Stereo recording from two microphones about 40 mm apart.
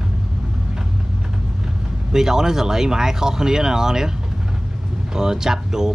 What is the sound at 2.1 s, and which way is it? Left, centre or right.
Speech, centre.